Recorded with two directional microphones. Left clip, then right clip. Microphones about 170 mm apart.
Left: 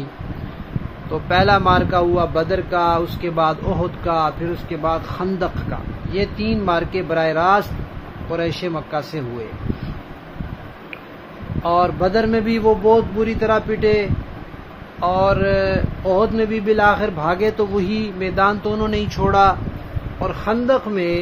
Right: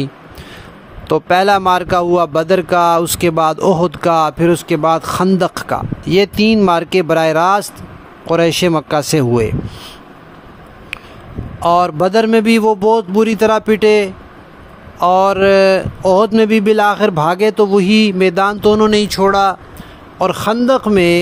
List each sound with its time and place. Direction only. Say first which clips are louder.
1.1 s speech: right 5 dB; 90° right
11.6 s a man's voice: right 5 dB; 90° right
15.0 s speech: right 6 dB; 90° right
19.0 s speech: right 5 dB; 35° right (ahead or behind)
20.2 s speech: right 7 dB; 90° right